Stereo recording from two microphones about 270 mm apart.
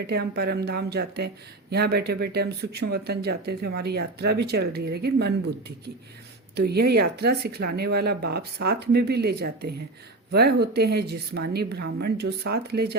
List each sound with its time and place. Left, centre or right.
0.1 s speech: right